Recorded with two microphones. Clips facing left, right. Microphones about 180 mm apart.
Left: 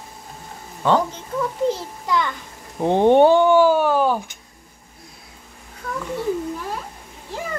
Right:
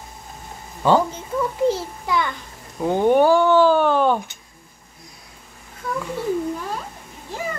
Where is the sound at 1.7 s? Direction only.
5° right (ahead or behind).